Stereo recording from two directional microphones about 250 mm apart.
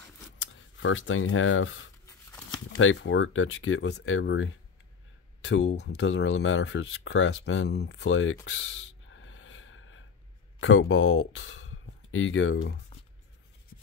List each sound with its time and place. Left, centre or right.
0.4 s speech: left
2.0 s a sound: centre
2.7 s speech: left
8.5 s gasp: left
10.6 s speech: left